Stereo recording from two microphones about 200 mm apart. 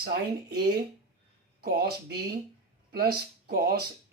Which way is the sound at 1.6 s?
50° right (ahead or behind).